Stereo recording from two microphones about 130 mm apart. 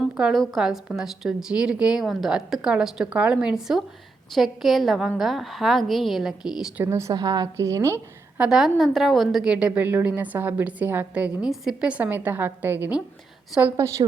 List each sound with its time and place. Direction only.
0.0 s a woman's voice: 5° right (ahead or behind)
6.8 s a woman's voice: 20° right (ahead or behind)
7.1 s a woman's voice: 30° right (ahead or behind)
8.4 s a woman's voice: 5° right (ahead or behind); by 14.0 s 20° right (ahead or behind)